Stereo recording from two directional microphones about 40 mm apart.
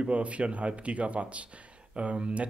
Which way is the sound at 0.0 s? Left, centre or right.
Right.